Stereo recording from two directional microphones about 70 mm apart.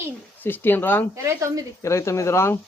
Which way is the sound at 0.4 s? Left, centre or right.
Left.